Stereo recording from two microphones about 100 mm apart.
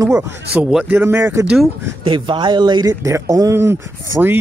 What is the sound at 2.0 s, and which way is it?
Speech, 55° right (ahead or behind).